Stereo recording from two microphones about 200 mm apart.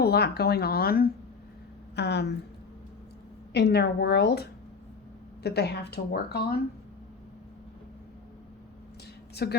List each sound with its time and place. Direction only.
0.0 s a woman's voice: 55° left (ahead or behind)
3.5 s a woman's voice: 55° left (ahead or behind)
9.3 s a woman's voice: 55° left (ahead or behind)